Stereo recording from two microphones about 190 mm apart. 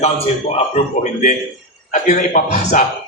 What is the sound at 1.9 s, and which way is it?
Speech, 40° left (ahead or behind).